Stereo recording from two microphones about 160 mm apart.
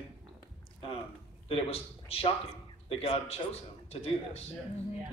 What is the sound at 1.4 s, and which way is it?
A man's voice, 40° left (ahead or behind).